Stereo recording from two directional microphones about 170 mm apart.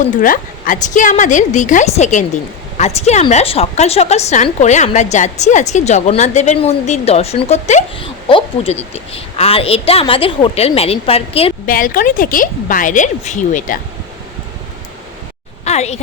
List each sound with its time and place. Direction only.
0.2 s a woman's voice: 50° left (ahead or behind)
8.0 s a woman's voice: 30° left (ahead or behind)
11.6 s a woman's voice: 55° left (ahead or behind)
15.6 s a woman's voice: 40° left (ahead or behind)